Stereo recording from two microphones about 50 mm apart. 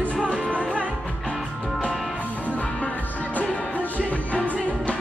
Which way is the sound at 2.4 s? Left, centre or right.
Left.